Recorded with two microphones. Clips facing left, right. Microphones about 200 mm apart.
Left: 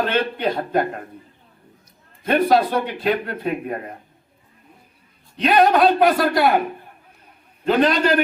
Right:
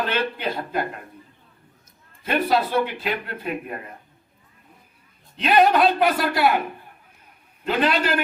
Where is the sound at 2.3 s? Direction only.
50° left (ahead or behind).